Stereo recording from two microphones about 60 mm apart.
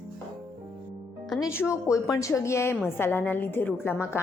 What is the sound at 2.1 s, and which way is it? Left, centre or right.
Speech, left.